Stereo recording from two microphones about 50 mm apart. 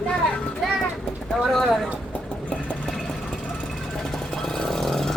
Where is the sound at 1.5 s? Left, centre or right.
Centre.